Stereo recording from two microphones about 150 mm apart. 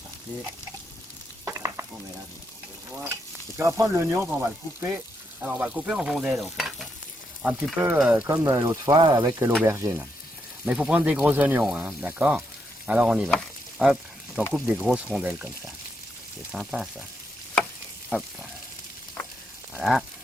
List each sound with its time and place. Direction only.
1.5 s frying: 20° right (ahead or behind)
2.9 s speech: 15° right (ahead or behind)
5.4 s stir: 10° right (ahead or behind)
8.3 s speech: 20° right (ahead or behind)
9.4 s speech: 15° right (ahead or behind)
13.3 s frying: centre (ahead or behind)
14.5 s speech: 5° right (ahead or behind)
16.5 s stir: centre (ahead or behind)
19.8 s stir: centre (ahead or behind)